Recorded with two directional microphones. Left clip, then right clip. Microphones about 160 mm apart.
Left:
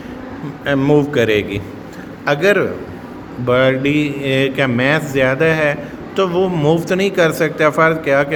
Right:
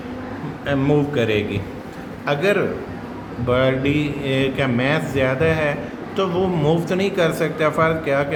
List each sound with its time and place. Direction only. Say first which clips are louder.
0.6 s a man's voice: left 5 dB; 45° left (ahead or behind)